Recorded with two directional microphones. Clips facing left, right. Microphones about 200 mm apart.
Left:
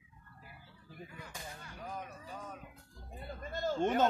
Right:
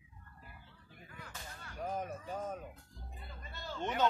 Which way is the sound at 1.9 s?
45° right (ahead or behind).